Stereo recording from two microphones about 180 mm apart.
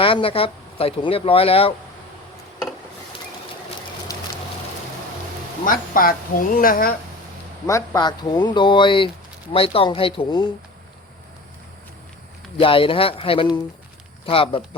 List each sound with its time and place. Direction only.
0.0 s speech: 30° left (ahead or behind)
4.1 s a sound: 20° left (ahead or behind)
5.6 s a man's voice: 50° left (ahead or behind)
7.7 s speech: 20° left (ahead or behind)
12.5 s speech: 30° left (ahead or behind)